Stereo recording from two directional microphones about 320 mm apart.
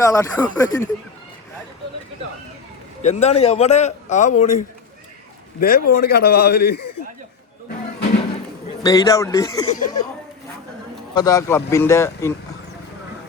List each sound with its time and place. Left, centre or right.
0.0 s a man's voice: centre
3.0 s a man's voice: left
8.8 s a man's voice: centre
11.1 s a man's voice: centre